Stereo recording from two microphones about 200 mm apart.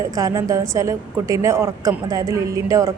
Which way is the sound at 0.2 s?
15° right (ahead or behind).